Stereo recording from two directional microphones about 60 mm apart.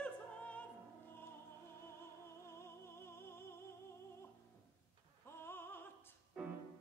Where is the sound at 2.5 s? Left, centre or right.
Left.